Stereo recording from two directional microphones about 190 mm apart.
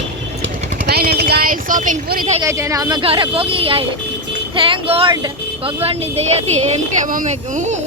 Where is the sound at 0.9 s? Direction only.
55° right (ahead or behind).